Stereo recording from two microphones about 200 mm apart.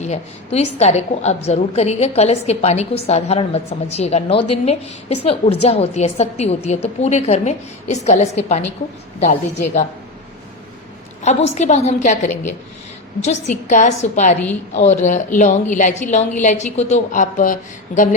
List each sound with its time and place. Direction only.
0.0 s a woman's voice: 35° left (ahead or behind)
11.2 s a woman's voice: 35° left (ahead or behind)